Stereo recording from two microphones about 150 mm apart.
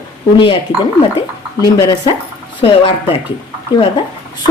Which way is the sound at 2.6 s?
40° left (ahead or behind).